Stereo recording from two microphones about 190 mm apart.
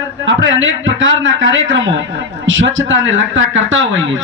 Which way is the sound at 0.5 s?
85° right.